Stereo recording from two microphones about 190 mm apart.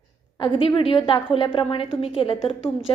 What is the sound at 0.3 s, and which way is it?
A woman's voice, 25° left (ahead or behind).